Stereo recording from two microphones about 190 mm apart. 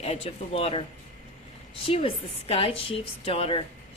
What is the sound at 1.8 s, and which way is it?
A woman's voice, 30° left (ahead or behind).